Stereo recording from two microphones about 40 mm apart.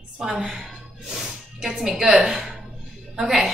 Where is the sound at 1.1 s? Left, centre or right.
Centre.